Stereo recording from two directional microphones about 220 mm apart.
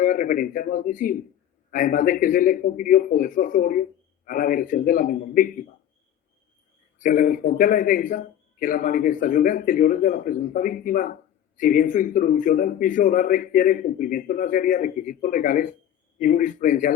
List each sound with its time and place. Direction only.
0.0 s a man's voice: 40° left (ahead or behind)
7.0 s a man's voice: 35° left (ahead or behind)